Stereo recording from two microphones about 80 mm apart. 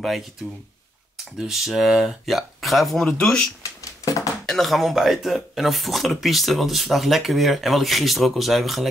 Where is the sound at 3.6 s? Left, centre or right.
Left.